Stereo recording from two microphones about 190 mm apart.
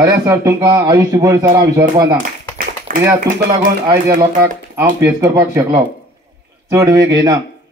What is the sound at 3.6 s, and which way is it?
Speech, 50° right (ahead or behind).